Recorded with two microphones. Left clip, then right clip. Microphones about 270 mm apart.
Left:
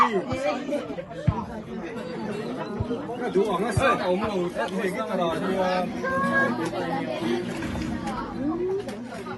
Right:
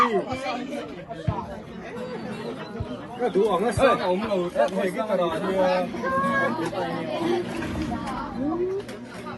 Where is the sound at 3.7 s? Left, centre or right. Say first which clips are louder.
Right 2 dB; right.